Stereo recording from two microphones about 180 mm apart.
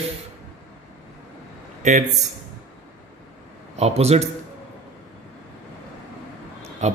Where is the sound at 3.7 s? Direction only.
35° right (ahead or behind).